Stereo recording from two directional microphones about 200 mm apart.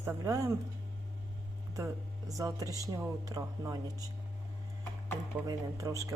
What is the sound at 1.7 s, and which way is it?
Speech, 15° right (ahead or behind).